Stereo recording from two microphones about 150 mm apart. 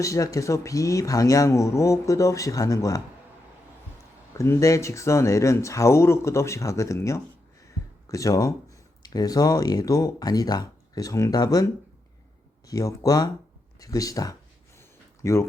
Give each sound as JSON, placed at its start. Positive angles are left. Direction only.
{"t": 0.0, "sound": "speech", "side_deg": 20}
{"t": 4.4, "sound": "speech", "side_deg": 20}
{"t": 12.6, "sound": "speech", "side_deg": 25}
{"t": 14.8, "sound": "a sound", "side_deg": 20}